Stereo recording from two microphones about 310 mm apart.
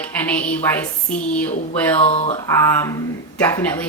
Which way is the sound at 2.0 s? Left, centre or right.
Centre.